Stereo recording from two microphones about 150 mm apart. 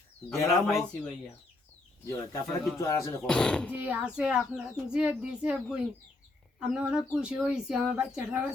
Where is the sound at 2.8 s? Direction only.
20° left (ahead or behind).